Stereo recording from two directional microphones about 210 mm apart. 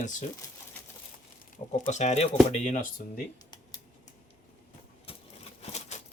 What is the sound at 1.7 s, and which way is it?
Speech, 35° left (ahead or behind).